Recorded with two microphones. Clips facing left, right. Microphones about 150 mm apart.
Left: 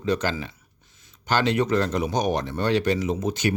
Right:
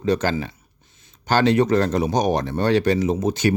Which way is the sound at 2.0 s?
35° right (ahead or behind).